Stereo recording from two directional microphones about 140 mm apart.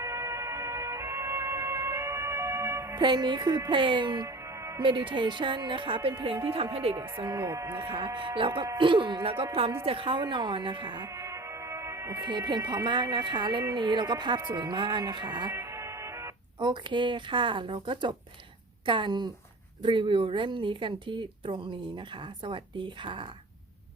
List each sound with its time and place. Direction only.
0.0 s emergency vehicle: 20° right (ahead or behind)
3.0 s speech: 35° right (ahead or behind)
7.2 s speech: 25° right (ahead or behind)
7.9 s speech: 35° right (ahead or behind)
11.2 s music: 20° right (ahead or behind)
12.3 s speech: 30° right (ahead or behind)
15.5 s music: 20° right (ahead or behind)
16.6 s speech: 35° right (ahead or behind)